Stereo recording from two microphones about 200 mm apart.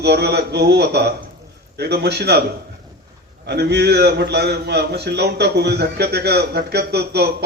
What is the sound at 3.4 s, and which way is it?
A man's voice, 55° right (ahead or behind).